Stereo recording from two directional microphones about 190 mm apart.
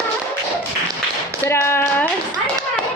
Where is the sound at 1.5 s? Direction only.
15° left (ahead or behind).